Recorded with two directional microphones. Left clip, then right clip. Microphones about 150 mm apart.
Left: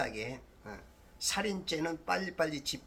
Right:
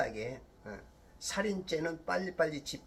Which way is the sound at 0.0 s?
15° left (ahead or behind).